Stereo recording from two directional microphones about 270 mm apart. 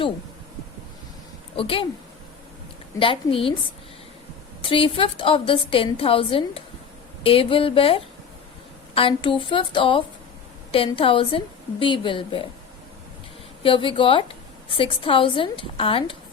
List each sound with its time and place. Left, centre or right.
1.5 s a woman's voice: centre
3.0 s a woman's voice: centre
4.6 s a woman's voice: centre
13.6 s a woman's voice: centre